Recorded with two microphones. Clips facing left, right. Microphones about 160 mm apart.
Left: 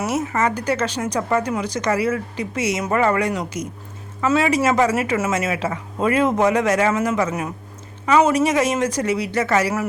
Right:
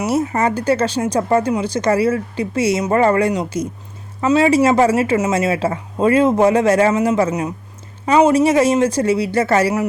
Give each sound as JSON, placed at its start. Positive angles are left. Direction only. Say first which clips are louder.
{"t": 0.1, "sound": "speech", "louder": "right 5 dB", "side_deg": -30}
{"t": 6.9, "sound": "speech", "louder": "right 4 dB", "side_deg": -20}
{"t": 8.0, "sound": "speech", "louder": "right 4 dB", "side_deg": -35}